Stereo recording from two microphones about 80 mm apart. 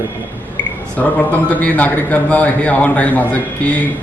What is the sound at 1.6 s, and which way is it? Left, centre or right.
A man's voice, centre.